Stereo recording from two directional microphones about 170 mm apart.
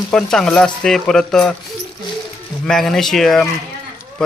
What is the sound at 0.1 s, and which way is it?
A man's voice, 5° left (ahead or behind).